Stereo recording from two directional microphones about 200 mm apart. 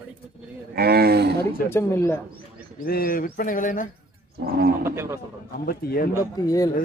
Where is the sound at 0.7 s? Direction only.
50° right (ahead or behind).